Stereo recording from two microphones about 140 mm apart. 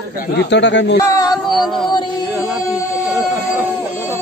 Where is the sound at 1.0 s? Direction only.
25° left (ahead or behind).